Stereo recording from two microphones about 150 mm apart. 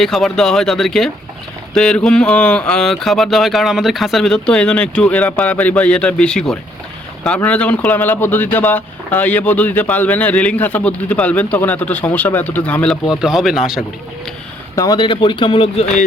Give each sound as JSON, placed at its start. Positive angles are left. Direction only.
{"t": 0.0, "sound": "speech", "side_deg": 0}
{"t": 13.2, "sound": "speech", "side_deg": -5}
{"t": 14.8, "sound": "speech", "side_deg": 30}